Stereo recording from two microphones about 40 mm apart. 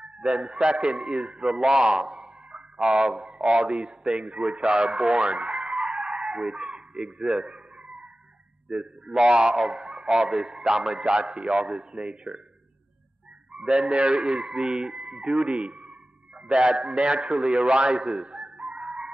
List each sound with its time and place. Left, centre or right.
0.0 s speech: right
2.8 s a man's voice: right
5.5 s chicken: centre
6.7 s a sound: right
7.1 s a man's voice: centre
8.6 s a man's voice: centre
13.7 s a man's voice: centre
16.7 s a man's voice: right
18.3 s dog: centre